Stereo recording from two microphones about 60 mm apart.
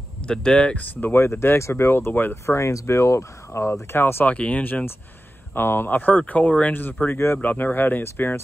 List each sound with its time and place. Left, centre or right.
0.3 s speech: centre
1.1 s speech: left
2.4 s speech: left
4.3 s speech: left
5.5 s speech: left